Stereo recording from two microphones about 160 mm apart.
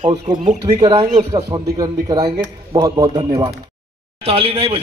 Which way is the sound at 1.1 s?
45° right (ahead or behind).